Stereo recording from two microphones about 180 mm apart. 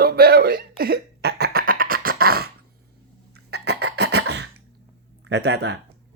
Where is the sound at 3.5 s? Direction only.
65° right (ahead or behind).